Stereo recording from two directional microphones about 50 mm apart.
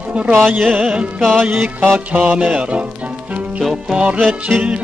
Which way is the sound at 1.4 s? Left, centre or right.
Right.